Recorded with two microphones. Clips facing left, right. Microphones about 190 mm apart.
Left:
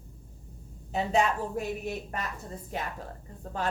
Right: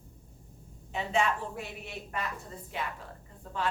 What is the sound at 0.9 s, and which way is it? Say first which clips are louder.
A woman's voice: left 3 dB; 40° left (ahead or behind).